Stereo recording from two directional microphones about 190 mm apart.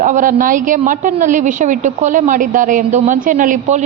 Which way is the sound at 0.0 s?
45° right (ahead or behind).